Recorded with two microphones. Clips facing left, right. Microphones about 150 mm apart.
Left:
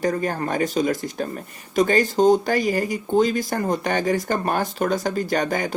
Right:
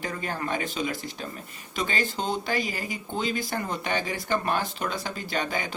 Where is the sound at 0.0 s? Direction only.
45° left (ahead or behind).